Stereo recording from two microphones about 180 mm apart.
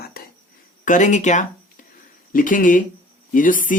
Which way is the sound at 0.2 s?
60° left (ahead or behind).